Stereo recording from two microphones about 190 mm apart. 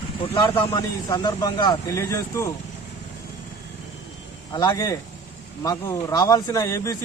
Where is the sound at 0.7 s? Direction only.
20° left (ahead or behind).